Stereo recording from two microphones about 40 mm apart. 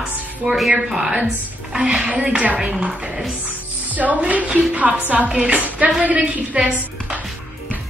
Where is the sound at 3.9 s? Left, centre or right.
Right.